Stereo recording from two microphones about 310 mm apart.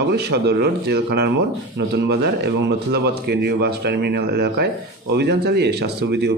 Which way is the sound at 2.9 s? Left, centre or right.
Right.